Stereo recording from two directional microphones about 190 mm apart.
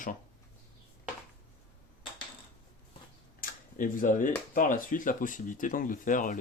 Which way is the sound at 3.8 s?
45° left (ahead or behind).